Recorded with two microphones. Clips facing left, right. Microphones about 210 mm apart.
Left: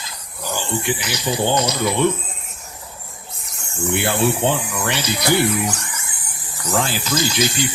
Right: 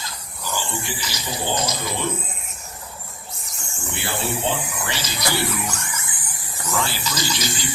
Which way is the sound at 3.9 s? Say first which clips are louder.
Left 7 dB; 60° left (ahead or behind).